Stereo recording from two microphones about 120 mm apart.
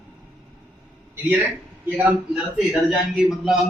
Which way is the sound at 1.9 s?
15° right (ahead or behind).